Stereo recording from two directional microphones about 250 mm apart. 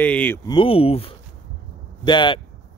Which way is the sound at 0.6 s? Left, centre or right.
Left.